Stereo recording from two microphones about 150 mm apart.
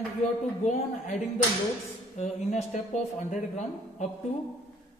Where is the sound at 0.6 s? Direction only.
50° left (ahead or behind).